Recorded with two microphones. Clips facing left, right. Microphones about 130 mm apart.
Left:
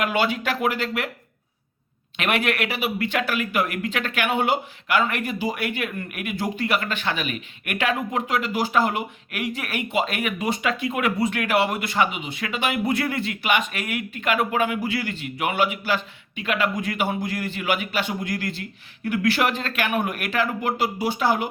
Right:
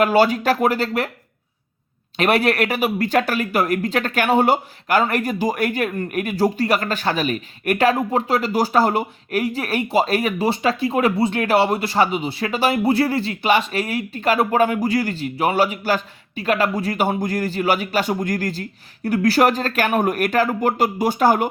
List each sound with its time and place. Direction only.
0.0 s speech: 35° right (ahead or behind)
2.1 s speech: 35° right (ahead or behind)